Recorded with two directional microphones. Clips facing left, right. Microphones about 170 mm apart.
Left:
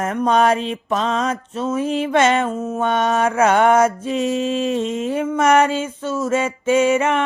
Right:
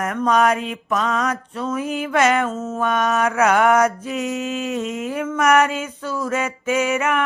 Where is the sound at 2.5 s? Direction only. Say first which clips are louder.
Left 3 dB; 10° left (ahead or behind).